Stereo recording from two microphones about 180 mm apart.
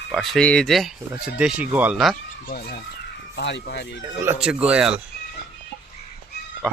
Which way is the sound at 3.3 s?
75° left (ahead or behind).